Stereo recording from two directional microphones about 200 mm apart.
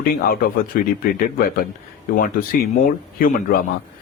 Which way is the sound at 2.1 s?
45° left (ahead or behind).